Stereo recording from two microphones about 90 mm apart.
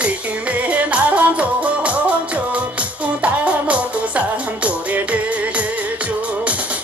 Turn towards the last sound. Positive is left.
turn(degrees=-15)  # may be behind; listen again after turning